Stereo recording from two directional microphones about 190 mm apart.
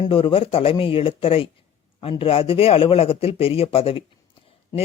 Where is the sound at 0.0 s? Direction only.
30° left (ahead or behind).